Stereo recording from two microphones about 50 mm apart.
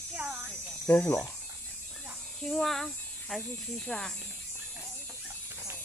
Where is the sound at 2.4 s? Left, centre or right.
Centre.